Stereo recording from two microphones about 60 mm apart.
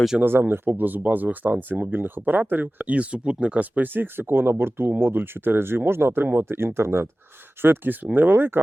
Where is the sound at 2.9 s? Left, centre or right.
Right.